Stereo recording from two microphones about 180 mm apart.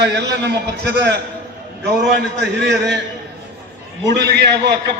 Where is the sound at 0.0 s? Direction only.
70° right (ahead or behind).